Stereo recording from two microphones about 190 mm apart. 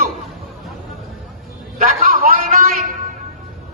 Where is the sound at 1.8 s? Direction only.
45° right (ahead or behind).